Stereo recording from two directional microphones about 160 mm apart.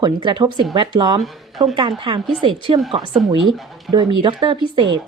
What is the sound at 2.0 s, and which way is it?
Speech, 30° right (ahead or behind).